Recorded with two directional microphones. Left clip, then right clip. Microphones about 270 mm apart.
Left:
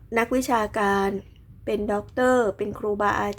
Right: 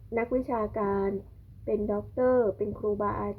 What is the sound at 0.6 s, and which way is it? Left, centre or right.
A woman's voice, left.